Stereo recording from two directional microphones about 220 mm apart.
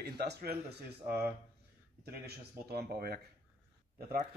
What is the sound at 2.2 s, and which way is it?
Speech, 45° right (ahead or behind).